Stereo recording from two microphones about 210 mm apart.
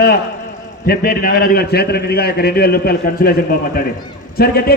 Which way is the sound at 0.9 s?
45° left (ahead or behind).